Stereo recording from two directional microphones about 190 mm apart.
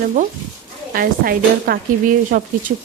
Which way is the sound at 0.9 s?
50° right (ahead or behind).